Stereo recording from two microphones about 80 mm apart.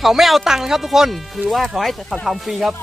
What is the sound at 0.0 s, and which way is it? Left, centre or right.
Speech, centre.